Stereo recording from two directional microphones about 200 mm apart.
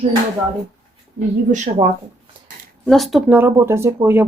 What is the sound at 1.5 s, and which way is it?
Speech, 40° right (ahead or behind).